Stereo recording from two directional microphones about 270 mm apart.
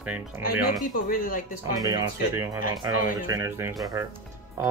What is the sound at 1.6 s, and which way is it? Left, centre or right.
Speech, centre.